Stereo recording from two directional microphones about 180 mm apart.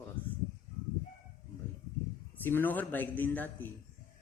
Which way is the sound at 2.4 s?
10° left (ahead or behind).